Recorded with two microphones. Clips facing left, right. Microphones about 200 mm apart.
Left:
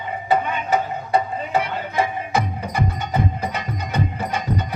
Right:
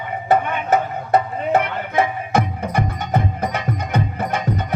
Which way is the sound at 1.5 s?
60° right (ahead or behind).